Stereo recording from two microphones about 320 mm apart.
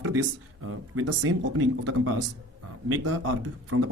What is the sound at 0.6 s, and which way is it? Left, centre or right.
Speech, right.